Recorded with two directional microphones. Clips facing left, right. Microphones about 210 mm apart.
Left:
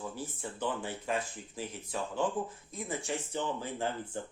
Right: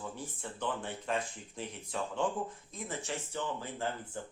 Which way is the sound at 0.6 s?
5° left (ahead or behind).